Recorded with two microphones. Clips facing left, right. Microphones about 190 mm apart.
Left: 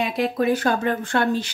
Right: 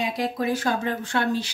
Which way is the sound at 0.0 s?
60° left (ahead or behind).